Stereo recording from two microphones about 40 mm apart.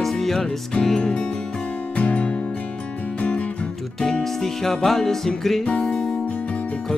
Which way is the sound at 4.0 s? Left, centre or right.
Centre.